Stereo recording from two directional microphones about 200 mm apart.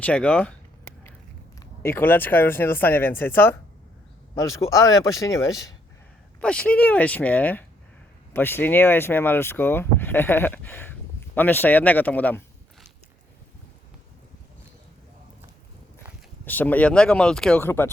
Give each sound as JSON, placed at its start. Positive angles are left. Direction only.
{"t": 0.0, "sound": "speech", "side_deg": 5}
{"t": 1.9, "sound": "speech", "side_deg": 10}
{"t": 6.4, "sound": "speech", "side_deg": 5}
{"t": 16.5, "sound": "speech", "side_deg": 10}